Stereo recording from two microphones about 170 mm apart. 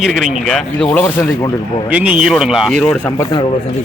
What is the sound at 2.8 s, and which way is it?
Speech, 10° left (ahead or behind).